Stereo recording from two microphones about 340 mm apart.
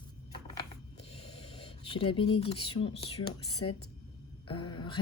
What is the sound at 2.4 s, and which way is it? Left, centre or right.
Speech, centre.